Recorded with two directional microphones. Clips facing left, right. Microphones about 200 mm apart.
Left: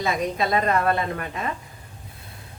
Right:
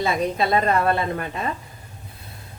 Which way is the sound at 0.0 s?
30° right (ahead or behind).